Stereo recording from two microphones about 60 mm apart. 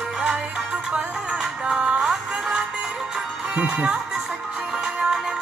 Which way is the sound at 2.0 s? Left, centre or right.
Centre.